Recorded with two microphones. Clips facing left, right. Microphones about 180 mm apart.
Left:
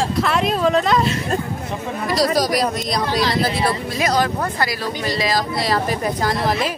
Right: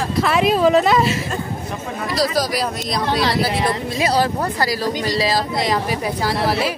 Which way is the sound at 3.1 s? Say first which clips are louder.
Right 2 dB; 60° right (ahead or behind).